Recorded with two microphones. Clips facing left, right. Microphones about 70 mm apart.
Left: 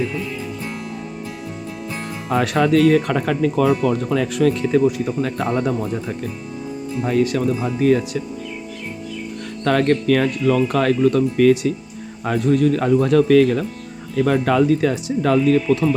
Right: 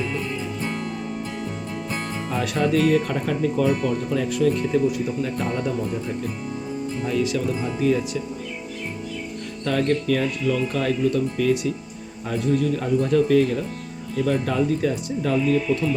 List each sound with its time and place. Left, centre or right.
2.3 s speech: left
3.1 s speech: left
4.1 s speech: left
7.0 s speech: left
9.6 s speech: left